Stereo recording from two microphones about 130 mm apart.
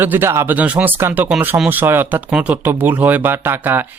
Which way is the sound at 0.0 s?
15° right (ahead or behind).